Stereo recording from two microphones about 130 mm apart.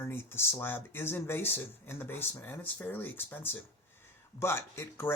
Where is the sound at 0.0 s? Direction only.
15° left (ahead or behind).